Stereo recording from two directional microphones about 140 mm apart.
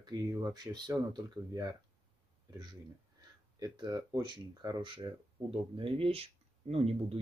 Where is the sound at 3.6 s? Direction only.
30° right (ahead or behind).